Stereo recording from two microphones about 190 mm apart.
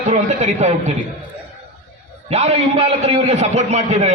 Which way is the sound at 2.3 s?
35° right (ahead or behind).